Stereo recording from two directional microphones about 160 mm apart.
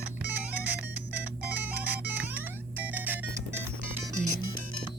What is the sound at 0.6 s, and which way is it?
Music, 10° right (ahead or behind).